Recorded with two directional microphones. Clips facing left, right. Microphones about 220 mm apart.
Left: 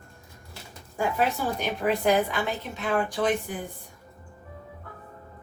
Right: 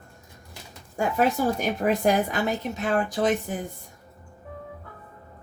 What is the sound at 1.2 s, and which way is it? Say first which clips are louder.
A woman's voice: right 6 dB; 45° right (ahead or behind).